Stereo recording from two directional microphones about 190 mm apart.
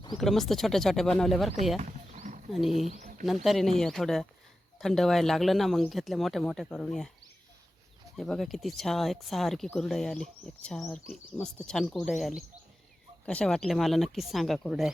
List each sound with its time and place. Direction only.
0.2 s speech: centre (ahead or behind)
1.8 s wild animals: 40° right (ahead or behind)
2.5 s speech: centre (ahead or behind)
2.7 s speech: 35° right (ahead or behind)
3.2 s speech: centre (ahead or behind)
8.1 s speech: centre (ahead or behind)